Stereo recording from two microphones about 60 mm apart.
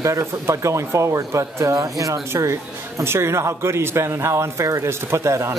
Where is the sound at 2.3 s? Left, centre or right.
Right.